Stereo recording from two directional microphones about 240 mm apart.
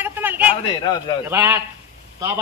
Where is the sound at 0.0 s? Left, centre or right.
Centre.